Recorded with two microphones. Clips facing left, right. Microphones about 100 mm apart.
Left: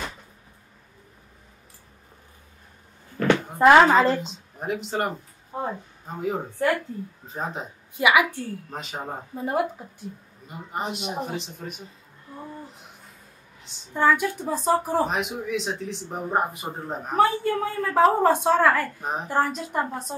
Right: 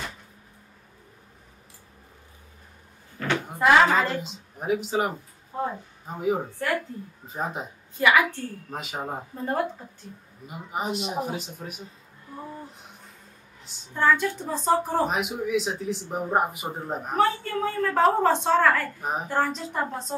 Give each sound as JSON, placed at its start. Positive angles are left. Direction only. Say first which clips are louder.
{"t": 3.5, "sound": "speech", "louder": "left 4 dB", "side_deg": 40}
{"t": 4.2, "sound": "speech", "louder": "left 1 dB", "side_deg": -5}
{"t": 5.5, "sound": "speech", "louder": "right 1 dB", "side_deg": 20}
{"t": 6.0, "sound": "speech", "louder": "right 2 dB", "side_deg": -5}
{"t": 8.0, "sound": "a woman's voice", "louder": "left 1 dB", "side_deg": 15}
{"t": 8.6, "sound": "speech", "louder": "right 1 dB", "side_deg": -5}
{"t": 9.4, "sound": "a woman's voice", "louder": "left 2 dB", "side_deg": 10}
{"t": 10.4, "sound": "speech", "louder": "even", "side_deg": -5}
{"t": 13.9, "sound": "a woman's voice", "louder": "left 1 dB", "side_deg": 10}
{"t": 15.0, "sound": "speech", "louder": "right 1 dB", "side_deg": -5}
{"t": 17.2, "sound": "a woman's voice", "louder": "left 3 dB", "side_deg": 10}
{"t": 18.9, "sound": "speech", "louder": "even", "side_deg": -5}
{"t": 19.2, "sound": "a woman's voice", "louder": "left 3 dB", "side_deg": 10}